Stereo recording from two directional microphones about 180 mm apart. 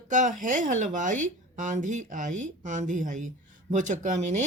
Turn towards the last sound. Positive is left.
turn(degrees=-40)  # may be behind; listen again after turning